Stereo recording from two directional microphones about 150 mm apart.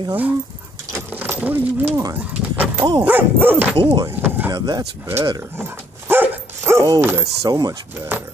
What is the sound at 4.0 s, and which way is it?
Door, 15° right (ahead or behind).